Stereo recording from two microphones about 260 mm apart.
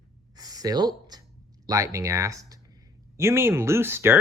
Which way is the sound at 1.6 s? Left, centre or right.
Centre.